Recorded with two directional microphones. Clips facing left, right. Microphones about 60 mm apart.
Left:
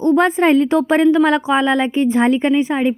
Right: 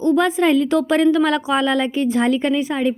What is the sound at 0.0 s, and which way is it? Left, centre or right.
A woman's voice, left.